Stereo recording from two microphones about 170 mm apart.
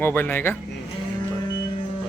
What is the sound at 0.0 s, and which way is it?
Speech, 10° left (ahead or behind).